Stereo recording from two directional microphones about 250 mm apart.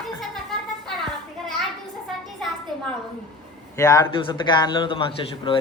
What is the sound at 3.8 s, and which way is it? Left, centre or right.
A man's voice, centre.